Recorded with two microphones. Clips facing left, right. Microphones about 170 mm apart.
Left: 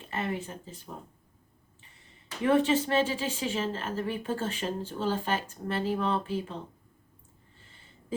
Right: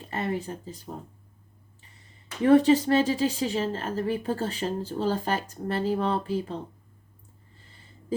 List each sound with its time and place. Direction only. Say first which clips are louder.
0.1 s a woman's voice: right 3 dB; 40° right (ahead or behind)
2.4 s a woman's voice: right 6 dB; 35° right (ahead or behind)